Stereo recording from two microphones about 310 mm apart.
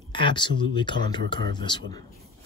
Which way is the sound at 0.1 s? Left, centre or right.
Centre.